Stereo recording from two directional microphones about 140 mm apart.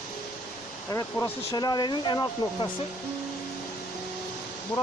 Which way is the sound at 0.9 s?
20° left (ahead or behind).